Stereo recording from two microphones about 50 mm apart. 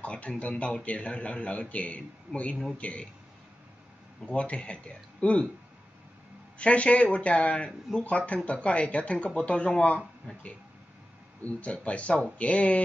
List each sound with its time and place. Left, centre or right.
0.0 s a man's voice: left
4.3 s a man's voice: left
6.6 s a man's voice: left
11.4 s a man's voice: left